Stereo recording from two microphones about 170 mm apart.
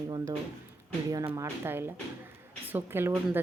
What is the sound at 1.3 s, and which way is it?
Speech, 15° right (ahead or behind).